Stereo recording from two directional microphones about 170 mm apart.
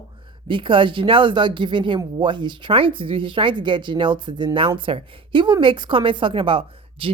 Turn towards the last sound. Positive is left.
turn(degrees=-30)  # may be behind; listen again after turning